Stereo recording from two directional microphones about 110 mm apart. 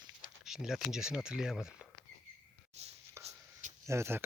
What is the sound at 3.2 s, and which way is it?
Chopping, 25° right (ahead or behind).